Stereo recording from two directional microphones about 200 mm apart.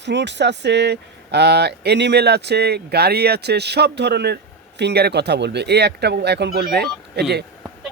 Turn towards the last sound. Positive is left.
turn(degrees=-55)  # may be behind; listen again after turning